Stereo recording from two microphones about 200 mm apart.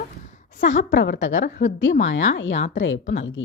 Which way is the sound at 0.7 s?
65° left (ahead or behind).